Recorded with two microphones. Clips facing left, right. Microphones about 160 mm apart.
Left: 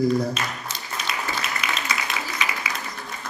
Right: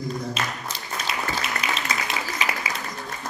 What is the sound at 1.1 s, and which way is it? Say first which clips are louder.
Applause: even; 25° right (ahead or behind).